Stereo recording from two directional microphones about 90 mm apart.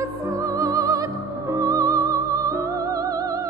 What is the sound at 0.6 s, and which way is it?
Music, 40° right (ahead or behind).